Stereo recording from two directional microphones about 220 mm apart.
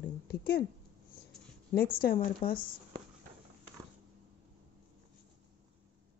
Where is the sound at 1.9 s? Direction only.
40° left (ahead or behind).